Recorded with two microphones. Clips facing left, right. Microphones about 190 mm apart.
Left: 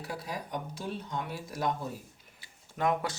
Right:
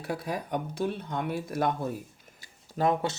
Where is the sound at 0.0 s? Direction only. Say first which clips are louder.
Right 5 dB; 55° right (ahead or behind).